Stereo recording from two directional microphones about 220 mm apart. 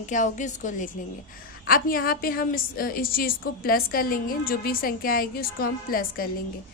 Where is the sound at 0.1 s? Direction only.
35° left (ahead or behind).